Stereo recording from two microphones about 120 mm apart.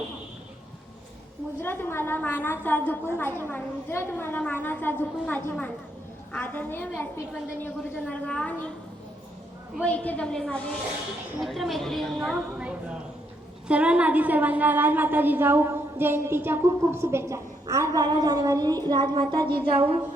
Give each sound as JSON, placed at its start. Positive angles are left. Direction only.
{"t": 1.6, "sound": "a woman's voice", "side_deg": 20}
{"t": 9.8, "sound": "a woman's voice", "side_deg": 10}